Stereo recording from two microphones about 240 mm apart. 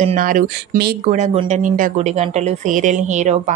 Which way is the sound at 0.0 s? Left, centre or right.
Right.